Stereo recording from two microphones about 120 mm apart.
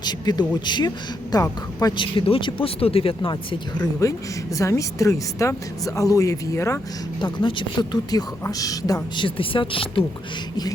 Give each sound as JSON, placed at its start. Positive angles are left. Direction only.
{"t": 0.0, "sound": "speech", "side_deg": 35}
{"t": 4.0, "sound": "speech", "side_deg": 25}
{"t": 7.3, "sound": "speech", "side_deg": 45}
{"t": 8.1, "sound": "speech", "side_deg": 30}
{"t": 9.2, "sound": "speech", "side_deg": 45}